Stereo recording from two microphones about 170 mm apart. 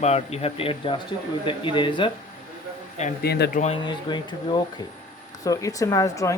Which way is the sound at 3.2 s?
70° left (ahead or behind).